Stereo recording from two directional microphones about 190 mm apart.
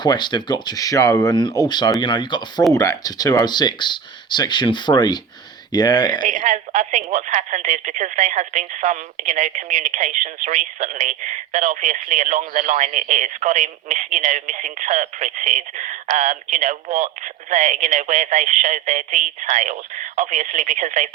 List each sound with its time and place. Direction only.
0.0 s speech: 25° left (ahead or behind)
6.2 s speech: 40° right (ahead or behind)